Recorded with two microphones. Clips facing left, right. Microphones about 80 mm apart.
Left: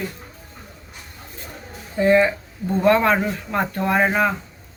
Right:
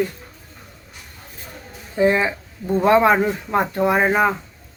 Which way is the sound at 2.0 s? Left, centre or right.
Centre.